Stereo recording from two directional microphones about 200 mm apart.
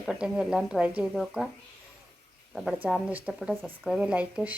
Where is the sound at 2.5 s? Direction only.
Centre (ahead or behind).